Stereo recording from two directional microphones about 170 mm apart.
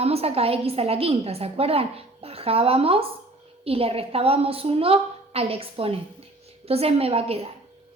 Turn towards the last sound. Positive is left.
turn(degrees=-35)  # may be behind; listen again after turning